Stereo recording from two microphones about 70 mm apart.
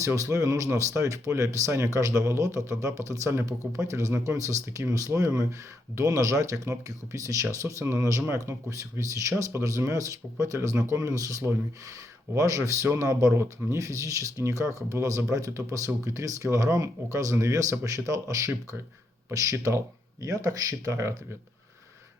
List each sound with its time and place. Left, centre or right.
0.0 s speech: right